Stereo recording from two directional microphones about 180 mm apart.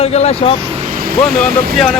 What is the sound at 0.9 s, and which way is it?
Vehicle, 50° right (ahead or behind).